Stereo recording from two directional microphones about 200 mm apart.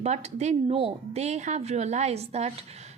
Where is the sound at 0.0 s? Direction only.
35° right (ahead or behind).